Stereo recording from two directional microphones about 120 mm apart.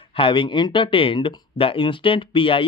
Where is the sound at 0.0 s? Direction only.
50° left (ahead or behind).